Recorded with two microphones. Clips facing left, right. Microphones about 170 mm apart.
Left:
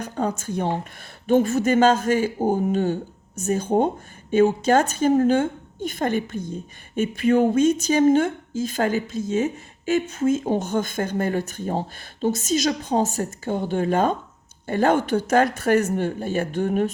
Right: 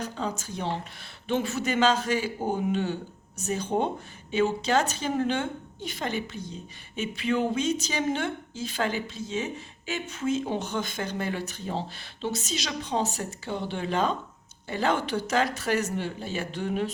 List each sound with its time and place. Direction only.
0.0 s a woman's voice: 55° left (ahead or behind)